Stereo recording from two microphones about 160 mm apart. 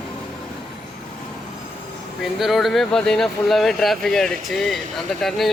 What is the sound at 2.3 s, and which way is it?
Speech, centre (ahead or behind).